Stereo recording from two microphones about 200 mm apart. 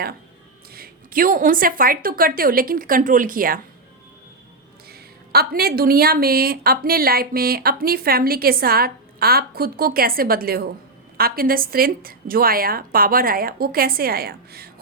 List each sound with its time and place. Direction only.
0.7 s a woman's voice: 45° right (ahead or behind)
4.9 s a woman's voice: 50° right (ahead or behind)